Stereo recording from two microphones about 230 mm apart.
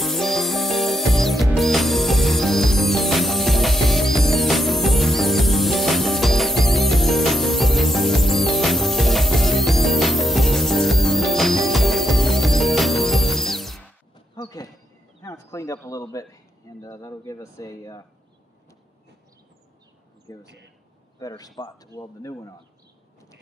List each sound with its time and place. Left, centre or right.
0.0 s music: centre
14.3 s a sound: centre
16.8 s speech: centre
20.3 s speech: centre